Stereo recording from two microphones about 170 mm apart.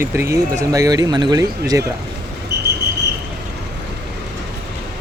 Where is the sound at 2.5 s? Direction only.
80° right.